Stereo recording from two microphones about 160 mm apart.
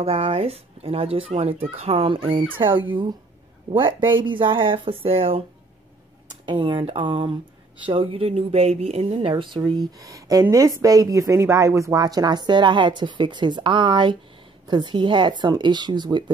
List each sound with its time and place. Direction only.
0.0 s speech: 35° right (ahead or behind)
4.1 s speech: 30° right (ahead or behind)
6.4 s speech: 30° right (ahead or behind)